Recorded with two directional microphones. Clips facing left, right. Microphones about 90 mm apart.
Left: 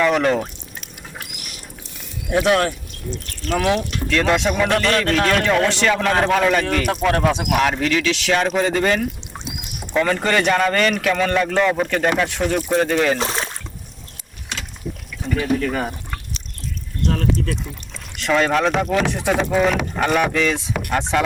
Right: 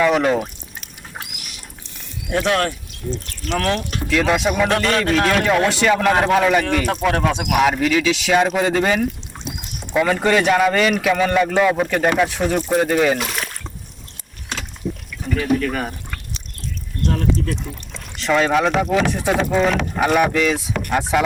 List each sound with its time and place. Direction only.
0.0 s speech: 5° right (ahead or behind)
2.3 s speech: 5° left (ahead or behind)
4.1 s a man's voice: 5° right (ahead or behind)
13.1 s a sound: 30° left (ahead or behind)
15.4 s speech: 25° left (ahead or behind)
17.2 s a man's voice: 5° right (ahead or behind)